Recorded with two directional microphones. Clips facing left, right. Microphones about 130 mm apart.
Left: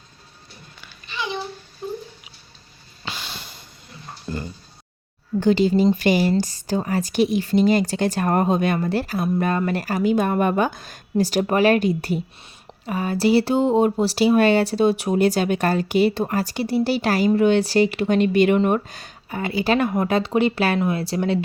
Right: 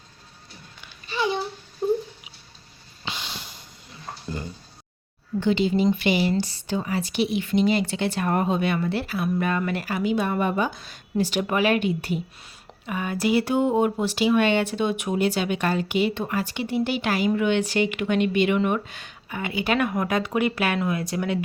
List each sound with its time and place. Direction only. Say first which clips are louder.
1.1 s babbling: right 4 dB; 35° right (ahead or behind)
1.8 s a sound: right 8 dB; 30° right (ahead or behind)
3.2 s snort: left 1 dB; 15° right (ahead or behind)
5.4 s speech: left 4 dB; 40° left (ahead or behind)